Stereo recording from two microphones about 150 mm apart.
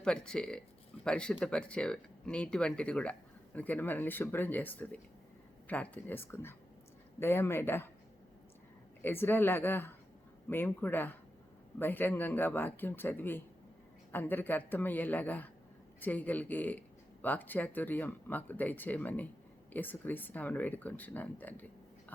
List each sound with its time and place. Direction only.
0.0 s speech: 5° left (ahead or behind)
9.0 s speech: 15° left (ahead or behind)